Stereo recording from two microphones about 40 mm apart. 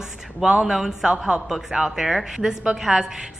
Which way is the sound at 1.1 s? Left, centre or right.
Centre.